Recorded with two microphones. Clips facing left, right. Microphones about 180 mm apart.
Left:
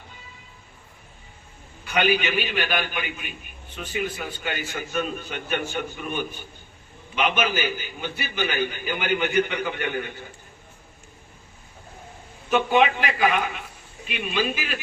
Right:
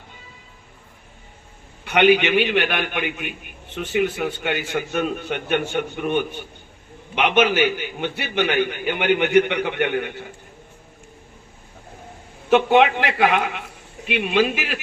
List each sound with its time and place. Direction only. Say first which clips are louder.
1.8 s a man's voice: right 7 dB; 65° right (ahead or behind)
12.5 s a man's voice: right 5 dB; 70° right (ahead or behind)